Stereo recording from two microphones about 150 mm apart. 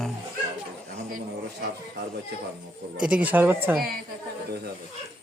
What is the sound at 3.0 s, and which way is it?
Speech, 5° right (ahead or behind).